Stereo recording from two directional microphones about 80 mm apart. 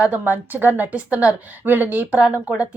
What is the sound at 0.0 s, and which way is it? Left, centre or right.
A woman's voice, right.